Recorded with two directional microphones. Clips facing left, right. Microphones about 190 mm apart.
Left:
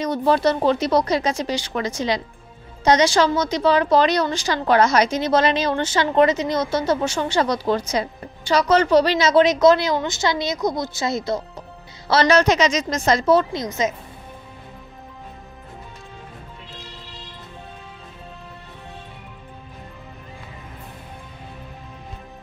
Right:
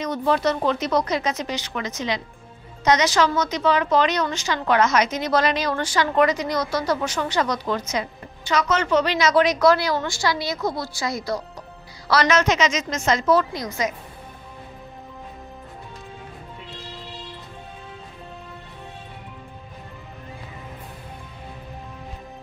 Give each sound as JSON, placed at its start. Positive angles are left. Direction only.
{"t": 0.0, "sound": "a woman's voice", "side_deg": 35}